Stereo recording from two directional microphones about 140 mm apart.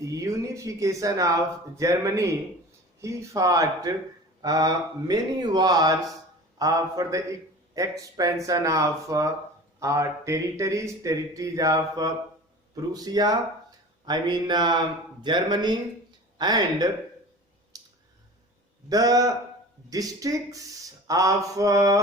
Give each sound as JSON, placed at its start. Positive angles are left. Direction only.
{"t": 0.0, "sound": "a man's voice", "side_deg": -20}
{"t": 17.7, "sound": "clicking", "side_deg": -25}
{"t": 18.9, "sound": "a man's voice", "side_deg": -25}